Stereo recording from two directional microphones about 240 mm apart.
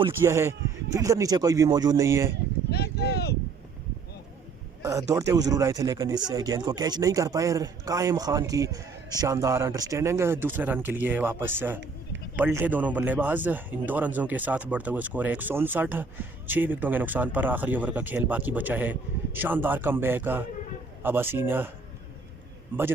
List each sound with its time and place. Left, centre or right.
0.0 s speech: centre
2.6 s speech: left
4.8 s speech: centre